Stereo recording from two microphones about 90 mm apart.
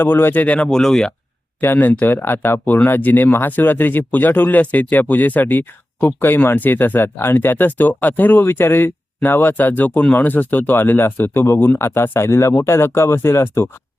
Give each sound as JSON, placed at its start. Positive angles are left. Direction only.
{"t": 0.0, "sound": "speech", "side_deg": 25}
{"t": 1.6, "sound": "speech", "side_deg": 25}